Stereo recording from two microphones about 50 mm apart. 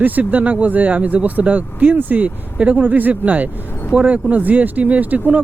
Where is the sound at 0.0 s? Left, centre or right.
Right.